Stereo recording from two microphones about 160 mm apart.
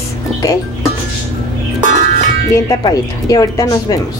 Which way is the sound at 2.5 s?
20° left (ahead or behind).